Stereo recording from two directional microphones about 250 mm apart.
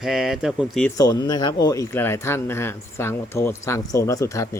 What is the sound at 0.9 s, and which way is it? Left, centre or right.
Speech, centre.